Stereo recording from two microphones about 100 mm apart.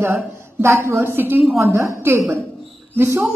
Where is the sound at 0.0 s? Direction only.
25° right (ahead or behind).